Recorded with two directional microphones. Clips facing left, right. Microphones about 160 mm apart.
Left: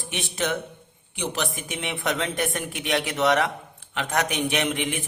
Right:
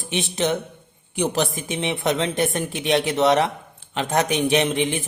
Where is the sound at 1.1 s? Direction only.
40° right (ahead or behind).